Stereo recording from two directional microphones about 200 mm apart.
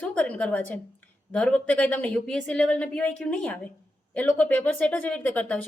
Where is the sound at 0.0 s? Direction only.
5° left (ahead or behind).